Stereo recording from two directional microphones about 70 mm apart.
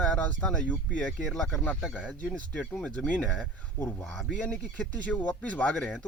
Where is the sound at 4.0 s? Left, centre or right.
Centre.